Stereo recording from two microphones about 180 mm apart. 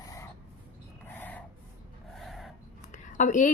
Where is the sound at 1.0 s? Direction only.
10° left (ahead or behind).